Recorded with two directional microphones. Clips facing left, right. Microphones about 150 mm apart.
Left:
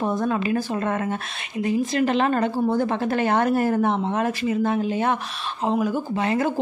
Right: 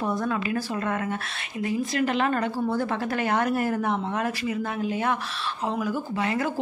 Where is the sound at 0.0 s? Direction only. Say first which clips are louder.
Left 4 dB; 25° left (ahead or behind).